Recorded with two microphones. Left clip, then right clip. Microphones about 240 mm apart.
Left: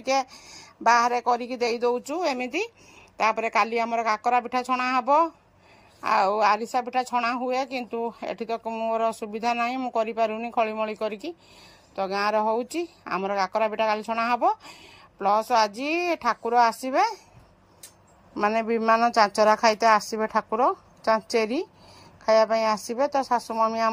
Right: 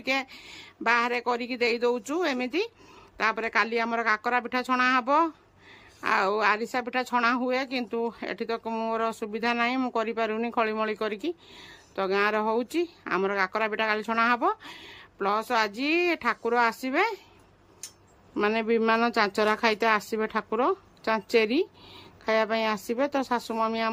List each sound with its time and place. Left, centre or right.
0.0 s a woman's voice: centre
18.3 s a woman's voice: centre
22.4 s a woman's voice: right
23.5 s a woman's voice: centre